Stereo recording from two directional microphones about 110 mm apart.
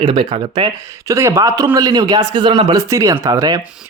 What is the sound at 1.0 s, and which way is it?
A man's voice, 25° right (ahead or behind).